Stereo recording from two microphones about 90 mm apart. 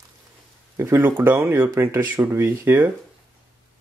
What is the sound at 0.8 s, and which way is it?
Speech, 25° right (ahead or behind).